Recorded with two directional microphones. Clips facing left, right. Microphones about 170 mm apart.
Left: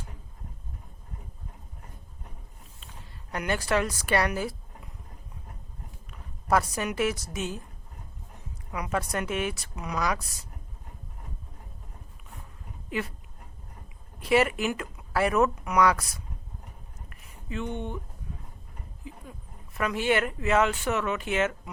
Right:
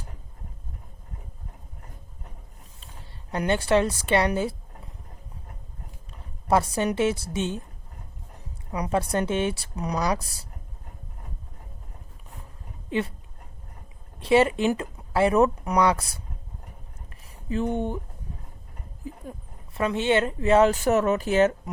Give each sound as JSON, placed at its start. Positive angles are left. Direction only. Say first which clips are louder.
{"t": 3.3, "sound": "a woman's voice", "louder": "right 5 dB", "side_deg": -30}
{"t": 6.5, "sound": "a woman's voice", "louder": "right 4 dB", "side_deg": -30}
{"t": 8.7, "sound": "speech", "louder": "right 5 dB", "side_deg": -30}
{"t": 12.9, "sound": "a woman's voice", "louder": "right 5 dB", "side_deg": -30}
{"t": 14.2, "sound": "a woman's voice", "louder": "right 4 dB", "side_deg": -30}
{"t": 17.1, "sound": "a sound", "louder": "right 7 dB", "side_deg": -35}
{"t": 19.0, "sound": "a sound", "louder": "right 7 dB", "side_deg": -45}
{"t": 19.7, "sound": "speech", "louder": "right 3 dB", "side_deg": -30}